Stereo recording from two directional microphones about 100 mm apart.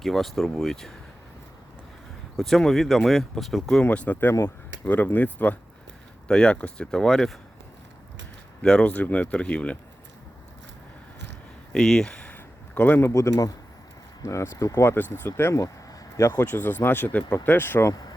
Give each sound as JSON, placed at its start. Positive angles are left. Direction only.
{"t": 0.0, "sound": "speech", "side_deg": 5}
{"t": 2.4, "sound": "speech", "side_deg": 0}
{"t": 3.8, "sound": "speech", "side_deg": 15}
{"t": 8.6, "sound": "speech", "side_deg": 10}
{"t": 11.7, "sound": "speech", "side_deg": 5}
{"t": 16.4, "sound": "speech", "side_deg": 20}